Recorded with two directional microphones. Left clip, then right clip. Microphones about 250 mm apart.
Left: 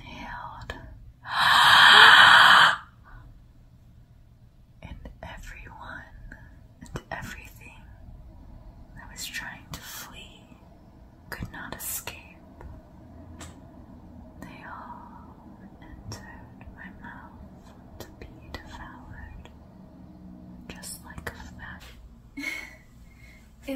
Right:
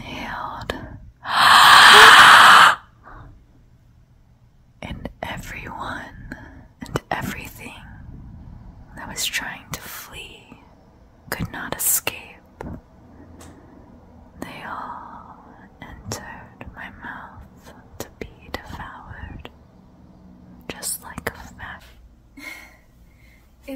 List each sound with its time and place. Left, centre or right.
0.0 s whispering: right
4.7 s whispering: right
9.1 s whispering: right
11.2 s whispering: right
14.4 s whispering: right
16.1 s whispering: right
20.6 s whispering: right